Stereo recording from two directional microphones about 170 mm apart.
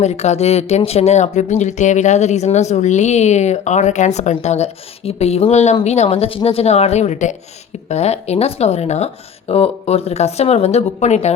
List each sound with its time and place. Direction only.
0.0 s a woman's voice: 40° left (ahead or behind)